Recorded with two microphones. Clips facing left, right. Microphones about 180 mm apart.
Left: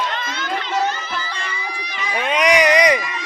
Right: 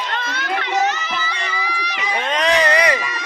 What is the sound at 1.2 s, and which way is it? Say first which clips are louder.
Crowd: right 3 dB; 75° right (ahead or behind).